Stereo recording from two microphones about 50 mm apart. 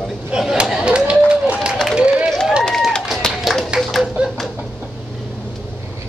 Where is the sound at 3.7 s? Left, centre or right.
Right.